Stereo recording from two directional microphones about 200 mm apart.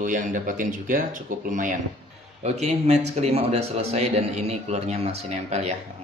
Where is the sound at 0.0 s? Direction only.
40° right (ahead or behind).